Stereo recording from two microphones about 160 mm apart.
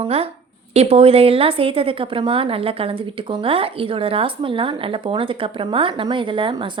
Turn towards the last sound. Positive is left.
turn(degrees=-30)  # may be behind; listen again after turning